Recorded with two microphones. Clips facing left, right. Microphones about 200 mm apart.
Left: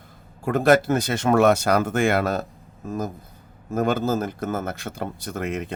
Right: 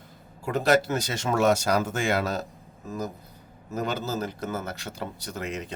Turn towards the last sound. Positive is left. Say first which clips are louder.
# left 5 dB
turn(degrees=55)  # may be behind; listen again after turning